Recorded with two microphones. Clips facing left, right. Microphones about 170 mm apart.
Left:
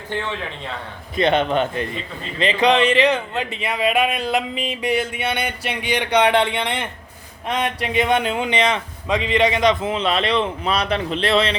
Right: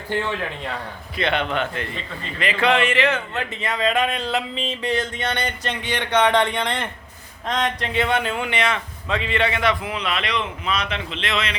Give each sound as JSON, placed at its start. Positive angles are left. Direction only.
{"t": 1.1, "sound": "speech", "side_deg": 20}